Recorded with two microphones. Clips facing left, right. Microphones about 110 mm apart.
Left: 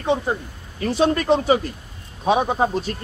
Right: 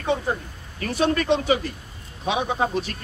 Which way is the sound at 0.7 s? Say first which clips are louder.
Left 3 dB; 30° left (ahead or behind).